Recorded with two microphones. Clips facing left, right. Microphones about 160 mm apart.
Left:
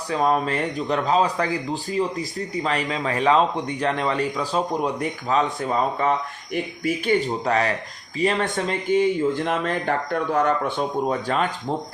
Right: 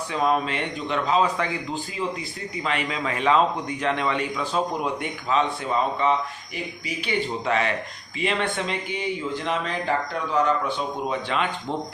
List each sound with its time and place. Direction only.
0.1 s a man's voice: 40° left (ahead or behind)